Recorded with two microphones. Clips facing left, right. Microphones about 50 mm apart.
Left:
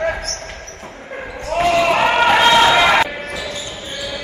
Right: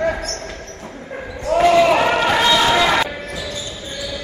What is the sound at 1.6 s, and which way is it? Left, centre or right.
Basketball bounce, centre.